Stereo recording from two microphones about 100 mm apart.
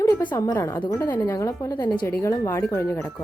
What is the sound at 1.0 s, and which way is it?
Speech, 45° left (ahead or behind).